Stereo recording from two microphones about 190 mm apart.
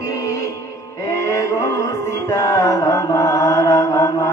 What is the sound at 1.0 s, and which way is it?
Music, 15° left (ahead or behind).